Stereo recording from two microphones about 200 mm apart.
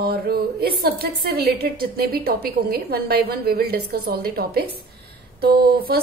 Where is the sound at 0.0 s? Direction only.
50° right (ahead or behind).